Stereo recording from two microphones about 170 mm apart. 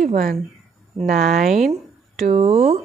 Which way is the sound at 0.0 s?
55° right (ahead or behind).